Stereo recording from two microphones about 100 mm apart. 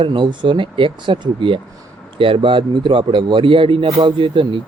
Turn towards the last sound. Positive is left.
turn(degrees=-55)  # may be behind; listen again after turning